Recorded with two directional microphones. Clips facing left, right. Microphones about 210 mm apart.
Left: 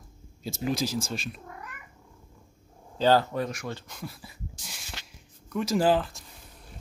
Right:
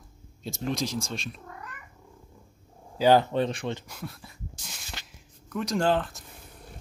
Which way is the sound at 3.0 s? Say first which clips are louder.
Right 2 dB; 20° right (ahead or behind).